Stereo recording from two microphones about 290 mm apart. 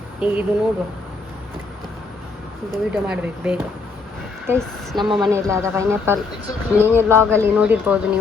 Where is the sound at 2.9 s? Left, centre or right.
Centre.